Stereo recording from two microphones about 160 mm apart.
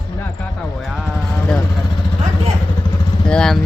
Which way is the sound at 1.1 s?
5° left (ahead or behind).